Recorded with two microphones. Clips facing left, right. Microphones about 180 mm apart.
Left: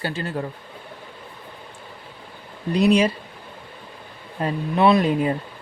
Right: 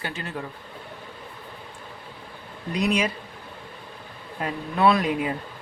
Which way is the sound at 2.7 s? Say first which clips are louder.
Left 7 dB; 30° left (ahead or behind).